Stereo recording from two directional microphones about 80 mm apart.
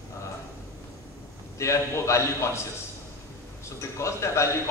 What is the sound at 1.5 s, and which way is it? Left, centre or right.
A man's voice, left.